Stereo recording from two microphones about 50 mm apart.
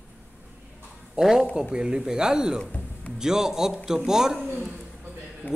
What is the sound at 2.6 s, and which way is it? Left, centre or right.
Music, left.